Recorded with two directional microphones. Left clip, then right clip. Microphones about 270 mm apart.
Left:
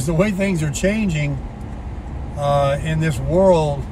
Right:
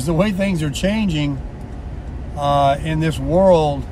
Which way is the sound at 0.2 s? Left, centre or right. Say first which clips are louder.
Left 2 dB; centre.